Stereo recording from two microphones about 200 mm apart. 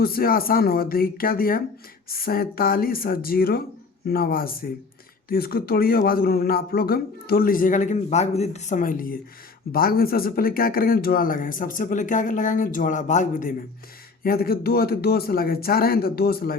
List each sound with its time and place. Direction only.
0.0 s a man's voice: 50° left (ahead or behind)
14.3 s a man's voice: 50° left (ahead or behind)